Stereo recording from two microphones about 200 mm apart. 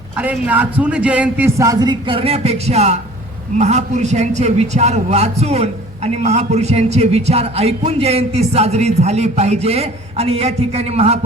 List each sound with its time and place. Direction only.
0.2 s a man's voice: 10° right (ahead or behind); by 11.2 s 30° right (ahead or behind)